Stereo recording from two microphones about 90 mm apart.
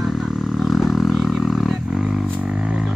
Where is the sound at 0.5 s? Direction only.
Centre (ahead or behind).